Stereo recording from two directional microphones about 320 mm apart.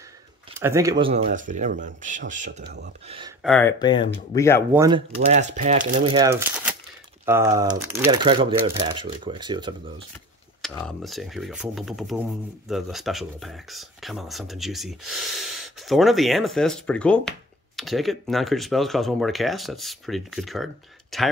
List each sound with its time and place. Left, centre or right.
0.6 s speech: centre; by 2.9 s right
3.1 s speech: centre
3.4 s speech: centre
4.7 s speech: centre
10.8 s speech: centre